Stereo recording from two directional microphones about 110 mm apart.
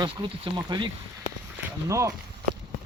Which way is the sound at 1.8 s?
30° right (ahead or behind).